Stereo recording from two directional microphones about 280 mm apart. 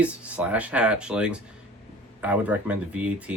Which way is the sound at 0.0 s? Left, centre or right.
Centre.